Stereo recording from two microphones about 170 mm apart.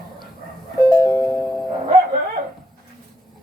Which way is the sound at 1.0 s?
15° left (ahead or behind).